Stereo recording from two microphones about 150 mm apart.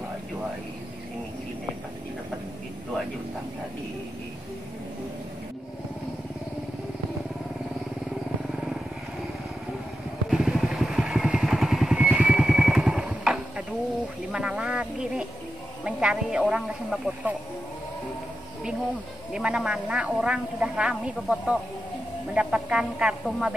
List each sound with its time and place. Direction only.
10.3 s vehicle: centre (ahead or behind)
14.3 s a sound: 5° right (ahead or behind)
15.8 s speech: 5° right (ahead or behind)
19.3 s a woman's voice: 5° right (ahead or behind)